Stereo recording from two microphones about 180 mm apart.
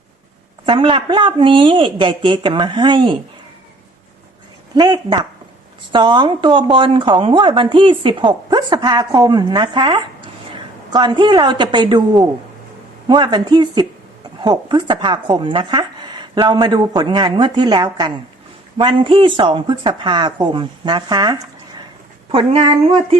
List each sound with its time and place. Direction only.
0.6 s speech: 30° right (ahead or behind)
4.7 s a woman's voice: 25° right (ahead or behind)